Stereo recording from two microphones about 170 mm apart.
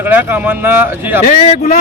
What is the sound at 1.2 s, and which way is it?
Speech, 45° left (ahead or behind).